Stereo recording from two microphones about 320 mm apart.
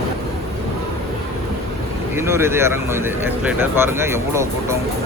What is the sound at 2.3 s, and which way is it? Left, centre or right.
Speech, centre.